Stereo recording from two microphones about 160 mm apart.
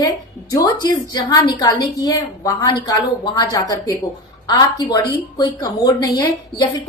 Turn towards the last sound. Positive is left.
turn(degrees=20)  # may be behind; listen again after turning